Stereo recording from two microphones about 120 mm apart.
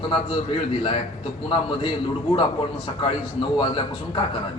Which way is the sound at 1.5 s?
45° left (ahead or behind).